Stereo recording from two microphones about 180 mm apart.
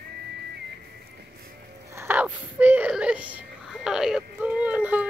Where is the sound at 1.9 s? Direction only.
10° right (ahead or behind).